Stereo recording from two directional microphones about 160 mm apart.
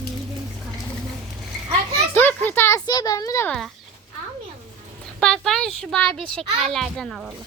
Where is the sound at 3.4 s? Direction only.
5° left (ahead or behind).